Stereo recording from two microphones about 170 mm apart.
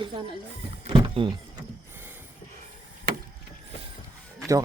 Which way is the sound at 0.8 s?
30° right (ahead or behind).